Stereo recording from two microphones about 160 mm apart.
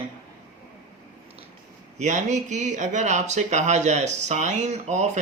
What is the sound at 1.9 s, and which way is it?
Speech, 50° right (ahead or behind).